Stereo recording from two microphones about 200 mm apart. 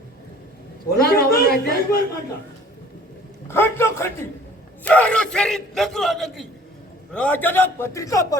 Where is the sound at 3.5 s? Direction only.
10° left (ahead or behind).